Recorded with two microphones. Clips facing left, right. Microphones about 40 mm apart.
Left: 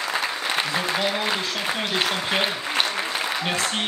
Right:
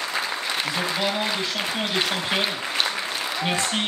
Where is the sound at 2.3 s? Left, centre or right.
Centre.